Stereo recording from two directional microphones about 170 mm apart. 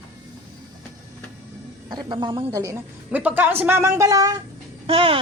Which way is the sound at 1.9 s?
25° right (ahead or behind).